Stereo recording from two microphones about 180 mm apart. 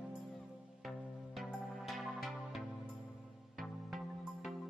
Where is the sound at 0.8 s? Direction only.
Centre (ahead or behind).